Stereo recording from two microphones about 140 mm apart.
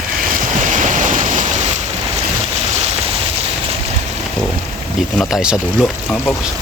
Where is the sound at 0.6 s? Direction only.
65° right (ahead or behind).